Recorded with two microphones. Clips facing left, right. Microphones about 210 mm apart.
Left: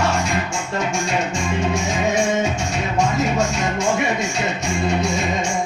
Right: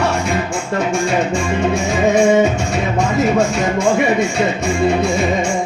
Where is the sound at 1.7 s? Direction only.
60° right (ahead or behind).